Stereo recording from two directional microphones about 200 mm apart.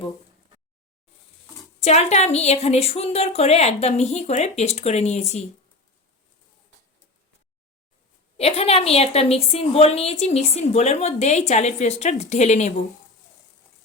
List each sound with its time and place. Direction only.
1.8 s a woman's voice: 35° left (ahead or behind)
8.4 s a woman's voice: 30° left (ahead or behind)